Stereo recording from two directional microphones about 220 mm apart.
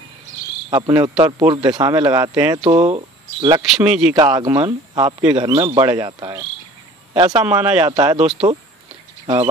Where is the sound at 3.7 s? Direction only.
5° right (ahead or behind).